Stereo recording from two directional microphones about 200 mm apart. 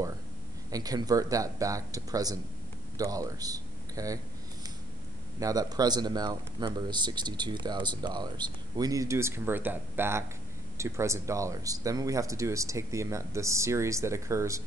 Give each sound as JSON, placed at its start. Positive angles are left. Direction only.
{"t": 0.7, "sound": "speech", "side_deg": -20}
{"t": 5.4, "sound": "speech", "side_deg": -20}